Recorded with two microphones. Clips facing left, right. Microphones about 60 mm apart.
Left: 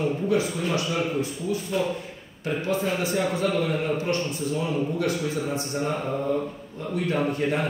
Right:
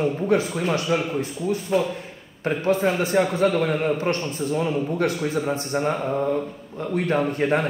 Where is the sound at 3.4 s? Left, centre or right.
Right.